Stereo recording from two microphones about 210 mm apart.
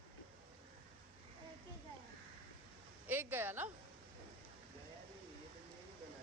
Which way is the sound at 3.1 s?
10° right (ahead or behind).